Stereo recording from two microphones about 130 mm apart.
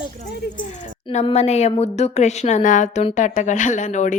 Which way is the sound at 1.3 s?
55° left (ahead or behind).